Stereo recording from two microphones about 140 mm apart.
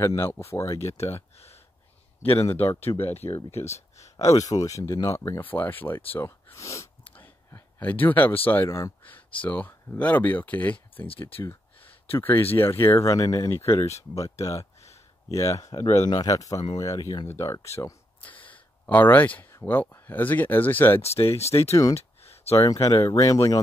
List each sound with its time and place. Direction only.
0.0 s speech: 20° left (ahead or behind)
0.9 s speech: 50° left (ahead or behind)
2.8 s speech: 45° left (ahead or behind)
4.2 s speech: 25° left (ahead or behind)
6.1 s a sound: 15° left (ahead or behind)
8.5 s speech: 15° left (ahead or behind)
11.4 s a sound: 15° left (ahead or behind)
12.5 s speech: 15° left (ahead or behind)
14.4 s a sound: 20° left (ahead or behind)
16.1 s speech: 25° left (ahead or behind)
18.2 s speech: 10° left (ahead or behind)
21.0 s speech: 45° left (ahead or behind)
21.9 s a sound: 45° left (ahead or behind)
22.6 s speech: 25° left (ahead or behind)